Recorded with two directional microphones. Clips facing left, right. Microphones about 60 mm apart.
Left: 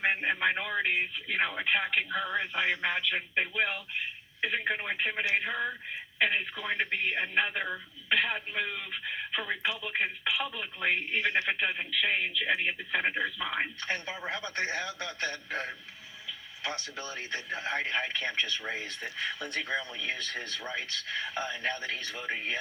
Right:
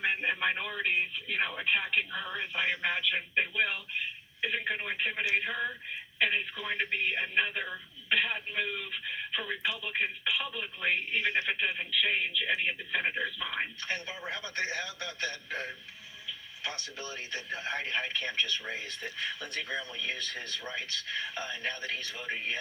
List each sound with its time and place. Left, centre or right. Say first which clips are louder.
1.3 s speech: left 2 dB; left
2.6 s speech: right 1 dB; centre
3.3 s speech: even; centre
9.3 s speech: left 2 dB; left
12.4 s speech: left 2 dB; centre
13.8 s speech: left 2 dB; left
14.3 s speech: left 1 dB; left